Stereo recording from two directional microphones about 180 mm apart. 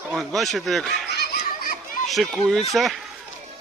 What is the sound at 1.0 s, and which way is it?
Fowl, 65° left (ahead or behind).